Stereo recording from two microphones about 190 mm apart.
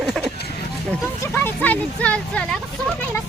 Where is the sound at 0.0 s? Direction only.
Centre (ahead or behind).